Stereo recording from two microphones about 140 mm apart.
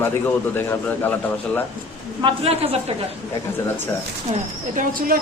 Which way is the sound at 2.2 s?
45° right (ahead or behind).